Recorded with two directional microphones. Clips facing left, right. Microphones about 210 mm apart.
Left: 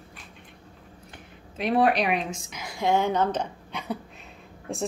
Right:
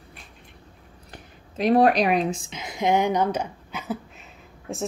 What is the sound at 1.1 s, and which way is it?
A woman's voice, 40° right (ahead or behind).